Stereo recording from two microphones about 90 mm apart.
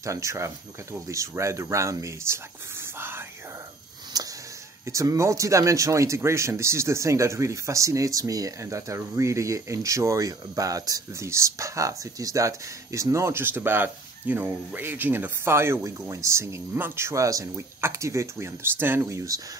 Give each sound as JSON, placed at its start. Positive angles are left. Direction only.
{"t": 0.0, "sound": "speech", "side_deg": -35}
{"t": 4.1, "sound": "a sound", "side_deg": -45}
{"t": 4.8, "sound": "speech", "side_deg": -35}
{"t": 19.0, "sound": "speech", "side_deg": -40}